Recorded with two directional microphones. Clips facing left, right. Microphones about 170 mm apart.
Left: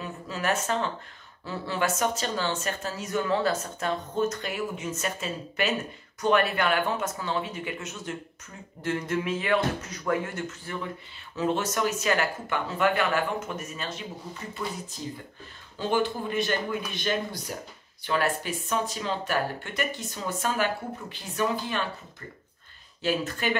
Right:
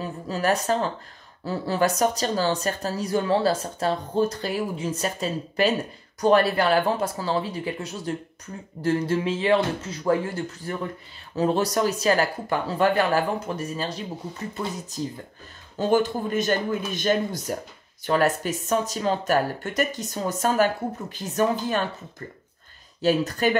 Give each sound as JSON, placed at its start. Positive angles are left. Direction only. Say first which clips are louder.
{"t": 0.0, "sound": "speech", "louder": "right 5 dB", "side_deg": -35}
{"t": 15.8, "sound": "speech", "louder": "right 5 dB", "side_deg": -45}
{"t": 23.0, "sound": "speech", "louder": "right 6 dB", "side_deg": -40}